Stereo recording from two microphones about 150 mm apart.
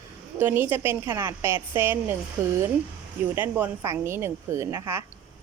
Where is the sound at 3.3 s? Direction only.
15° right (ahead or behind).